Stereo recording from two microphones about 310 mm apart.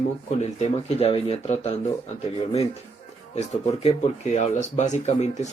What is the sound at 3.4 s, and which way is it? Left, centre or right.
Speech, centre.